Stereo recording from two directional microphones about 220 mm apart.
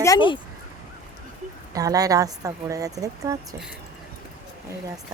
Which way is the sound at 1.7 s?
15° right (ahead or behind).